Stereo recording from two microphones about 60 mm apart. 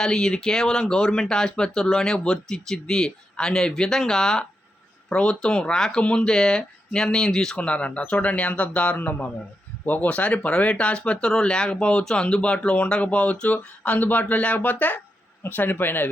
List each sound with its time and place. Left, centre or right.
0.0 s speech: centre
9.0 s a man's voice: left